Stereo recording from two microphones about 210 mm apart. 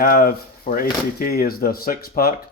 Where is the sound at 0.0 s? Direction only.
45° left (ahead or behind).